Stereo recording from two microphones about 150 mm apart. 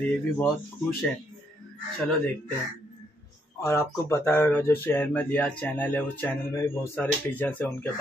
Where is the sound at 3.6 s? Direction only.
15° left (ahead or behind).